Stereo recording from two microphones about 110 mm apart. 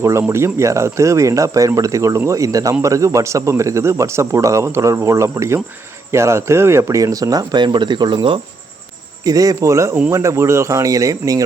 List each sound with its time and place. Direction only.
0.0 s speech: 25° right (ahead or behind); by 8.4 s 50° right (ahead or behind)
9.2 s speech: 35° right (ahead or behind)